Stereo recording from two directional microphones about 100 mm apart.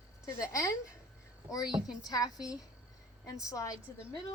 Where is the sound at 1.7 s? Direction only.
5° right (ahead or behind).